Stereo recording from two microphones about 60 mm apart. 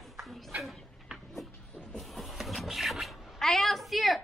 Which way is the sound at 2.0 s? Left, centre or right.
Centre.